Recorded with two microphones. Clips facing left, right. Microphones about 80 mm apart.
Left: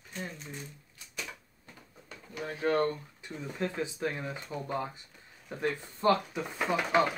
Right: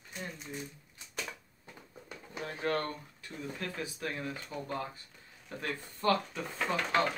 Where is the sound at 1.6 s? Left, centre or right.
Centre.